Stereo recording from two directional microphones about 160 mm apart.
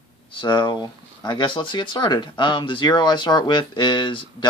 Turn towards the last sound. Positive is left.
turn(degrees=30)  # may be behind; listen again after turning